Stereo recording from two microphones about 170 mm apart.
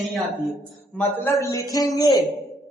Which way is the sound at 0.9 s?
10° left (ahead or behind).